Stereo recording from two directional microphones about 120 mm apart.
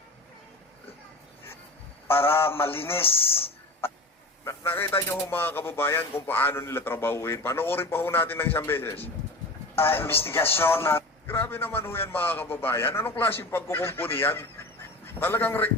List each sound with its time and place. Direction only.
2.0 s a man's voice: 20° left (ahead or behind)
4.4 s a man's voice: 15° left (ahead or behind)